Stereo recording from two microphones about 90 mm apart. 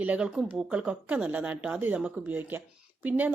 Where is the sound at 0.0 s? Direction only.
15° right (ahead or behind).